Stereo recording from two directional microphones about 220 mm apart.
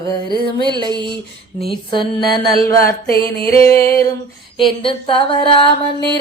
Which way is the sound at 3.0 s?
45° left (ahead or behind).